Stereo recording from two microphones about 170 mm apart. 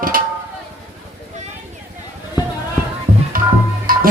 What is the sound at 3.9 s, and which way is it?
Music, 55° right (ahead or behind).